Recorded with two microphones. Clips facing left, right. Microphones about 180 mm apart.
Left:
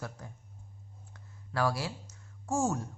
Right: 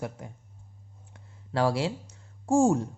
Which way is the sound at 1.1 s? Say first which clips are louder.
Right 8 dB; 25° right (ahead or behind).